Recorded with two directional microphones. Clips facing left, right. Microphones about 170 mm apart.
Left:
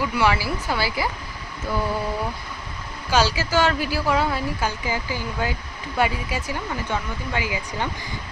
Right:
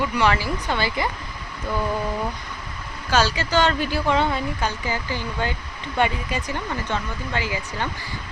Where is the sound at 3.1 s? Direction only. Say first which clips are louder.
Even; 10° left (ahead or behind).